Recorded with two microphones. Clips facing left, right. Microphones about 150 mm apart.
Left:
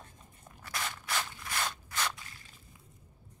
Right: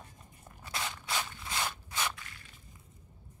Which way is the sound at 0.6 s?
20° right (ahead or behind).